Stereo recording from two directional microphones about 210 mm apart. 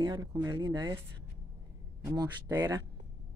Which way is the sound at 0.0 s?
20° right (ahead or behind).